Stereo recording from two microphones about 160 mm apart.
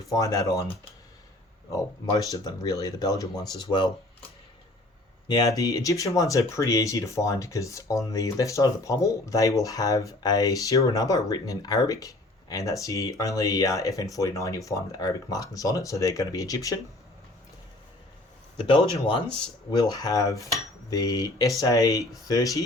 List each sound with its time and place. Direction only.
0.1 s speech: 20° left (ahead or behind)
1.7 s speech: 20° left (ahead or behind)
5.3 s speech: 25° left (ahead or behind)
18.5 s speech: 30° left (ahead or behind)